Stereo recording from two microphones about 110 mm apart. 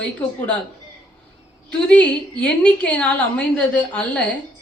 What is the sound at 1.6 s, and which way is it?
A woman's voice, 10° left (ahead or behind).